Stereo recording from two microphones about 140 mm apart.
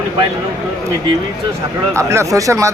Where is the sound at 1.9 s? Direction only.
20° right (ahead or behind).